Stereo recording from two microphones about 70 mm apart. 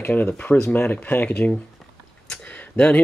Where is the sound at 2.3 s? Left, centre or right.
Centre.